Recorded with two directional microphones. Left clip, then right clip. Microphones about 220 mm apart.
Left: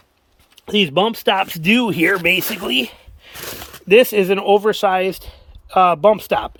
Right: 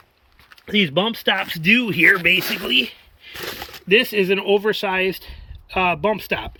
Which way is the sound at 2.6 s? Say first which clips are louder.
Even; 10° left (ahead or behind).